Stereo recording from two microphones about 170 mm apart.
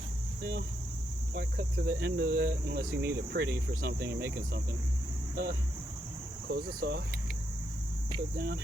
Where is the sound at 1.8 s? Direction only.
75° right (ahead or behind); by 2.8 s 60° right (ahead or behind).